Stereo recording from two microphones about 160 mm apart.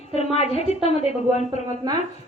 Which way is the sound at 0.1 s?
40° left (ahead or behind).